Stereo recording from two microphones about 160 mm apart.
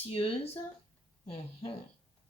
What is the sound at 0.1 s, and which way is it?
Speech, 35° left (ahead or behind).